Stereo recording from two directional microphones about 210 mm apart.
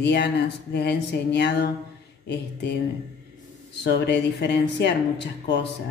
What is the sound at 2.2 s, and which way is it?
Mantra, 55° left (ahead or behind).